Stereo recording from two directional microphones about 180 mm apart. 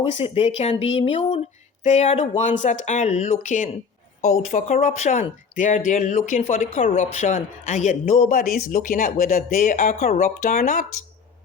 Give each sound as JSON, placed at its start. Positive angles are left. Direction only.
{"t": 0.0, "sound": "speech", "side_deg": 35}